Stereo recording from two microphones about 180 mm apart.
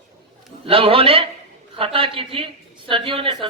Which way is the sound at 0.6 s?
30° right (ahead or behind).